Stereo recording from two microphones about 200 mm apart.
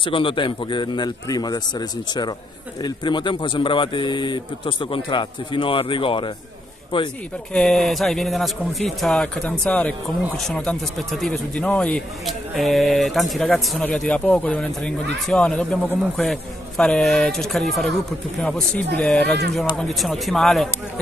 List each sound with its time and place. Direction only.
0.0 s a man's voice: 25° left (ahead or behind)
7.5 s speech: centre (ahead or behind)